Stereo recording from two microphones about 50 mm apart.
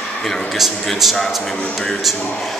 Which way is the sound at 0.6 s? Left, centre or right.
Centre.